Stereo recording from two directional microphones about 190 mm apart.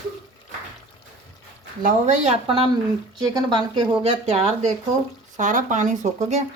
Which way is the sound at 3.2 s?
20° right (ahead or behind).